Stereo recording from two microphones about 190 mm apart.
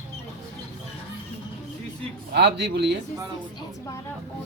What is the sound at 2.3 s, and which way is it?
Speech, 60° right (ahead or behind).